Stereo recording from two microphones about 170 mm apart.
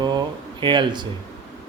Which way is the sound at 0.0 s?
25° right (ahead or behind).